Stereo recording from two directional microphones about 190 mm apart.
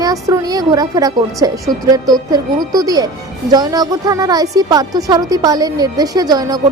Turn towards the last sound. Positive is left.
turn(degrees=-20)  # may be behind; listen again after turning